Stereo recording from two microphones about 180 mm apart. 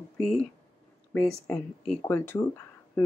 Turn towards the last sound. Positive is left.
turn(degrees=15)  # may be behind; listen again after turning